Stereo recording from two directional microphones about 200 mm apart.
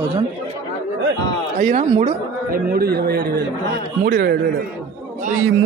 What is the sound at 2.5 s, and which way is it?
A man's voice, 50° right (ahead or behind).